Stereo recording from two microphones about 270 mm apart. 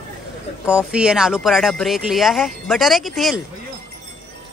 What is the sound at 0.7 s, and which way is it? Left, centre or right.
Speech, centre.